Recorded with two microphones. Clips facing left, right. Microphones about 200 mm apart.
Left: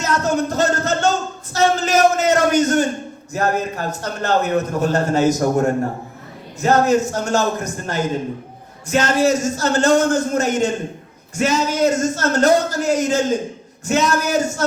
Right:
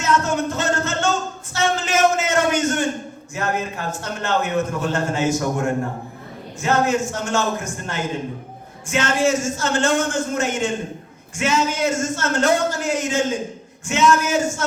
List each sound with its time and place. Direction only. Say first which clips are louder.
0.0 s music: left 1 dB; 40° left (ahead or behind)
1.5 s a sound: left 5 dB; 40° left (ahead or behind)
3.3 s a man's voice: left 4 dB; 40° left (ahead or behind)